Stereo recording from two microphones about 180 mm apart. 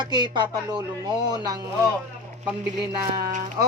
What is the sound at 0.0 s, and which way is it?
Speech, 25° right (ahead or behind).